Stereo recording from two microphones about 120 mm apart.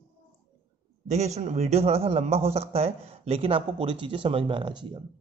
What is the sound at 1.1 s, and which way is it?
A man's voice, 65° right (ahead or behind).